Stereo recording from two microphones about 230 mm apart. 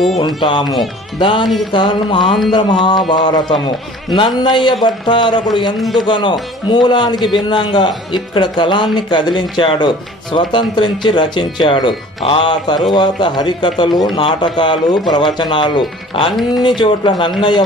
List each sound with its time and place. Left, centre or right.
0.4 s speech: centre
5.8 s a man's voice: centre
6.0 s speech: left